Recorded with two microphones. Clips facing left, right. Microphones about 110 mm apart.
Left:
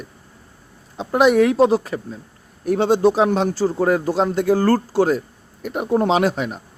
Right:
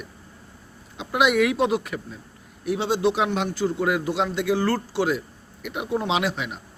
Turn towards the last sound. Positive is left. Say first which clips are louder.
# left 6 dB
turn(degrees=40)  # may be behind; listen again after turning